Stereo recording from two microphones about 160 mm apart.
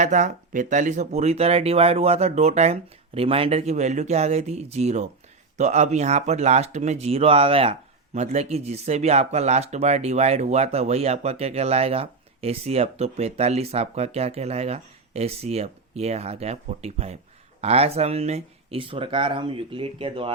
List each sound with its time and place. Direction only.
0.0 s speech: 50° right (ahead or behind); by 20.3 s 35° right (ahead or behind)